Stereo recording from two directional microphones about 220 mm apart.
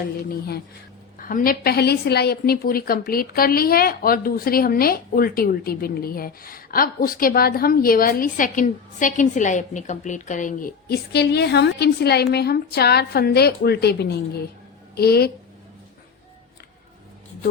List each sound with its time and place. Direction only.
0.2 s a woman's voice: 45° left (ahead or behind)